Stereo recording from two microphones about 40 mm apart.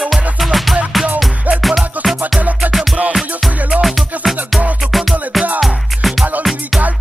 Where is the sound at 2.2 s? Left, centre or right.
Right.